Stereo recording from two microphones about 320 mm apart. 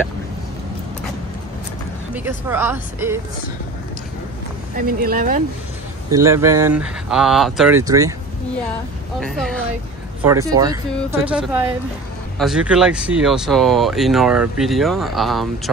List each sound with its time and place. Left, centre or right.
2.1 s speech: centre
4.7 s speech: right
6.1 s speech: centre
9.2 s speech: centre
10.2 s speech: centre